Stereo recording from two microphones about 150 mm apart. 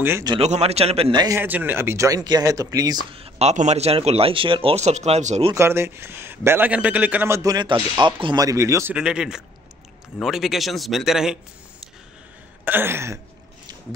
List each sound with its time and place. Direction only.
0.4 s a man's voice: 45° right (ahead or behind)
1.1 s a man's voice: 25° right (ahead or behind)
1.4 s speech: 10° right (ahead or behind); by 5.5 s 45° right (ahead or behind)
5.5 s a man's voice: 15° right (ahead or behind)
8.9 s speech: 5° right (ahead or behind)
12.6 s a man's voice: 15° right (ahead or behind)